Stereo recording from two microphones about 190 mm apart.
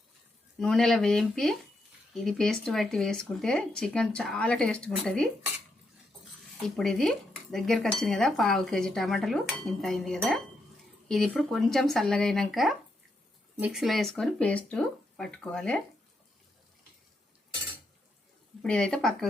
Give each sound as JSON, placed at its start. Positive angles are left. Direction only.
{"t": 0.6, "sound": "dishes", "side_deg": 0}
{"t": 6.6, "sound": "dishes", "side_deg": 0}
{"t": 18.6, "sound": "dishes", "side_deg": 5}